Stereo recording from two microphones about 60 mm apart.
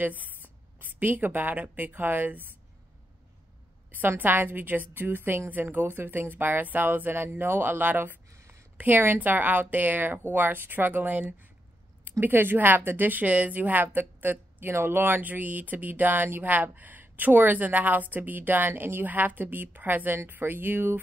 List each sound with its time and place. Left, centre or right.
0.0 s a woman's voice: right
4.2 s a woman's voice: right
8.3 s a sound: right
8.7 s a woman's voice: right